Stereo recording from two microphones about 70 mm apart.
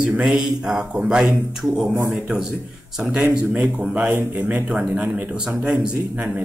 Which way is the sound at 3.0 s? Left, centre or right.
Centre.